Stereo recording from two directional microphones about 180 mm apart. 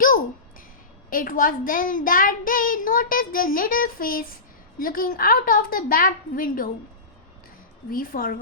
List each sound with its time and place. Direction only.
1.1 s a child's voice: 50° left (ahead or behind)
7.9 s a child's voice: 55° left (ahead or behind)